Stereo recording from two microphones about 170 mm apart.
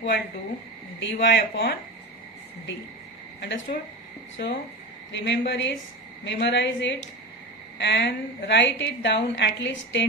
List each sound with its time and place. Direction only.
0.9 s speech: 90° left; by 1.7 s 65° left (ahead or behind)
3.4 s a woman's voice: 90° left